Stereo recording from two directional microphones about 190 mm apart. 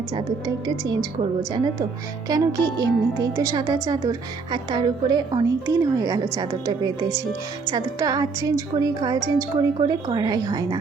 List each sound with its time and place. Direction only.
0.2 s speech: 25° right (ahead or behind)
2.3 s speech: 20° right (ahead or behind)